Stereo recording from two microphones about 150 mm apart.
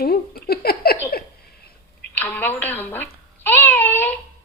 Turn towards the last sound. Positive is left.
turn(degrees=15)  # may be behind; listen again after turning